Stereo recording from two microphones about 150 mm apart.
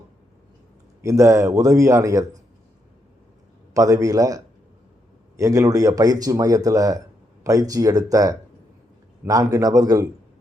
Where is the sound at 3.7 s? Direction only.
20° right (ahead or behind).